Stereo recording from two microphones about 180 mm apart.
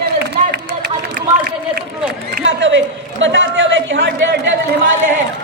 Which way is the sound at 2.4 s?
90° right.